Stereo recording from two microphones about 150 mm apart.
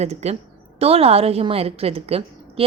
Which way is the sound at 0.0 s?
45° right (ahead or behind).